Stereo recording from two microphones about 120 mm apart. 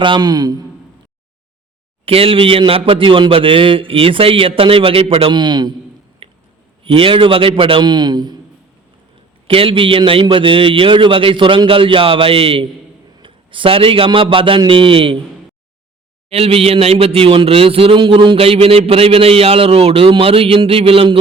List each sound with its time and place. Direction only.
0.0 s a man's voice: 40° right (ahead or behind)
2.0 s a man's voice: 50° right (ahead or behind)
6.2 s a sound: 45° right (ahead or behind)
6.8 s a man's voice: 45° right (ahead or behind)
9.5 s a man's voice: 50° right (ahead or behind)
16.3 s a man's voice: 55° right (ahead or behind)